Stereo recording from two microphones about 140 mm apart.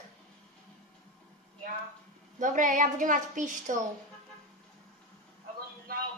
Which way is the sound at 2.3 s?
65° right (ahead or behind).